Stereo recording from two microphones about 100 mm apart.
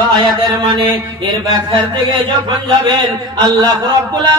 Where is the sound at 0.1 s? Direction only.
55° right (ahead or behind).